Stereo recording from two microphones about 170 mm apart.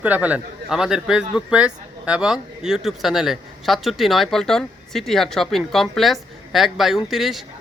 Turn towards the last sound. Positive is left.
turn(degrees=0)  # may be behind; listen again after turning